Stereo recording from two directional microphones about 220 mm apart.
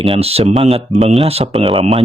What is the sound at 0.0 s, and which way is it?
Speech, 25° right (ahead or behind).